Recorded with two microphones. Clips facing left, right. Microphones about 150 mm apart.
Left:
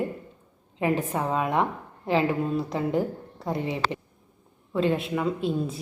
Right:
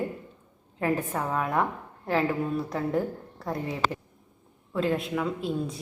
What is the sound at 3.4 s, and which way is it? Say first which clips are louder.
A woman's voice: left 1 dB; centre (ahead or behind).